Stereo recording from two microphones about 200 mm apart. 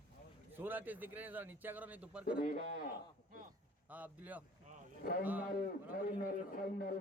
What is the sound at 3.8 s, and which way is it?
A man's voice, 10° right (ahead or behind).